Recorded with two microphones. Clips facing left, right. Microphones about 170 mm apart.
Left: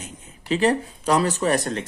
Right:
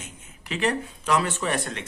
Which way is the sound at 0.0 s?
35° left (ahead or behind).